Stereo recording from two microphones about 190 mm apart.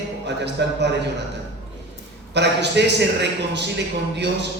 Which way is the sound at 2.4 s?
65° right (ahead or behind).